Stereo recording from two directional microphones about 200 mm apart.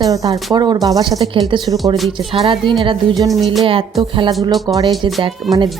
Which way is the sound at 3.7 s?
25° right (ahead or behind).